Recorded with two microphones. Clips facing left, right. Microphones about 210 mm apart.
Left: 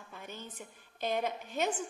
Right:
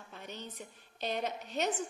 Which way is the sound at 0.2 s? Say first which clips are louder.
Right 1 dB; 50° left (ahead or behind).